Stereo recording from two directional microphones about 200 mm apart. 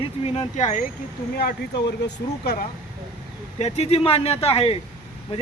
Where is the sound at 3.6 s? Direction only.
30° left (ahead or behind).